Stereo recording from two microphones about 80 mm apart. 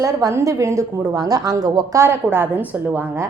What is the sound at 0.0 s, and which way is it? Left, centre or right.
Speech, right.